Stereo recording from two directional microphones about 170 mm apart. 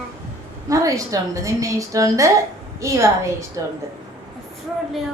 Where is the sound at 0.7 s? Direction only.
20° right (ahead or behind).